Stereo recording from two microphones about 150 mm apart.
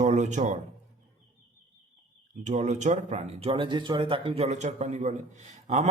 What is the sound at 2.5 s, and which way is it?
Speech, 55° right (ahead or behind).